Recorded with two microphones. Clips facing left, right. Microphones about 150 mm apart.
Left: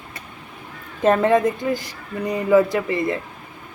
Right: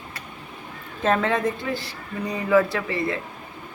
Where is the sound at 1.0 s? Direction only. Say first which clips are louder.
Left 6 dB; 10° left (ahead or behind).